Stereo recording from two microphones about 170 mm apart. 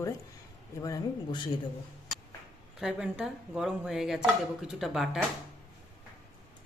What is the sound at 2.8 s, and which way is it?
Speech, 5° right (ahead or behind).